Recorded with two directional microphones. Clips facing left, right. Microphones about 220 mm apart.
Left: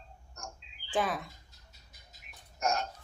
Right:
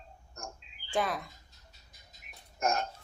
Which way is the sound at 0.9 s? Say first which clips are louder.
Even; centre (ahead or behind).